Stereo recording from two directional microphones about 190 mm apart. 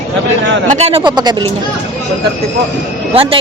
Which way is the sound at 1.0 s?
25° right (ahead or behind).